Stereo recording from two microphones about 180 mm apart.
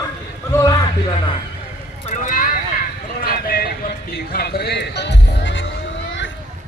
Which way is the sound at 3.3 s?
55° left (ahead or behind).